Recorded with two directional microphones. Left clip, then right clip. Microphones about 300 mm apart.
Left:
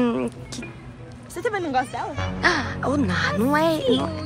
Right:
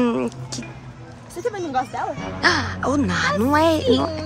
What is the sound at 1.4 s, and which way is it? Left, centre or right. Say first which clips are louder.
Speech: left 1 dB; left.